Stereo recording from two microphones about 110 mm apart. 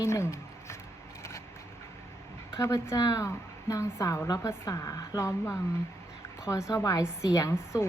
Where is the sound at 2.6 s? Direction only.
25° left (ahead or behind).